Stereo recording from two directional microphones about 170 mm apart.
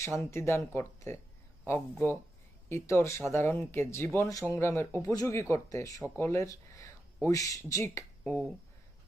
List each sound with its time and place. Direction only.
0.0 s speech: 15° left (ahead or behind)
2.6 s speech: 15° left (ahead or behind)
8.2 s speech: 5° left (ahead or behind)